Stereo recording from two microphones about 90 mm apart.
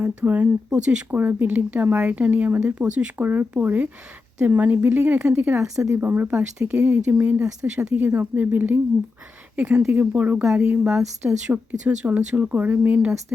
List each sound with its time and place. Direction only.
0.0 s speech: 20° right (ahead or behind)
9.6 s speech: 15° right (ahead or behind)